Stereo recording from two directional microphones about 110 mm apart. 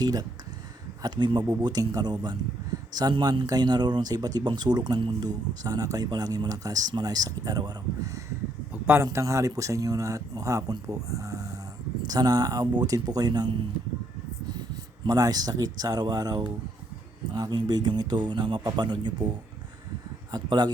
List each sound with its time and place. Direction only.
0.0 s speech: 35° right (ahead or behind)
8.7 s a sound: 20° right (ahead or behind)
9.1 s speech: 30° right (ahead or behind)
15.0 s speech: 35° right (ahead or behind)
20.3 s speech: 40° right (ahead or behind)